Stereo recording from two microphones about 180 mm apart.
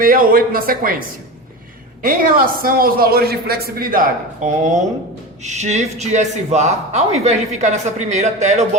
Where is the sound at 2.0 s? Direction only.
50° right (ahead or behind).